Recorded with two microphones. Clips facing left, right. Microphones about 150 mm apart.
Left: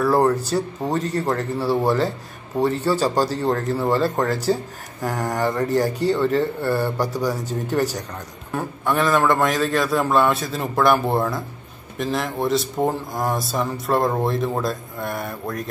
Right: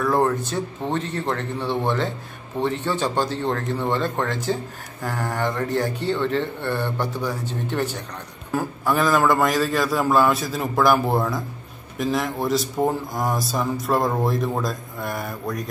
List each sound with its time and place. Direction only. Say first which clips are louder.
0.0 s speech: left 3 dB; 10° left (ahead or behind)
0.4 s speech: left 4 dB; 35° left (ahead or behind)
1.1 s speech: left 3 dB; 10° left (ahead or behind)
8.5 s speech: even; centre (ahead or behind)